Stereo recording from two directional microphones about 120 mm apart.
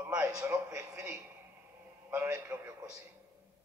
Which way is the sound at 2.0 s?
20° right (ahead or behind).